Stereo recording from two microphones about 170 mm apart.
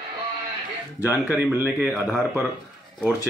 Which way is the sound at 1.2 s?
10° right (ahead or behind).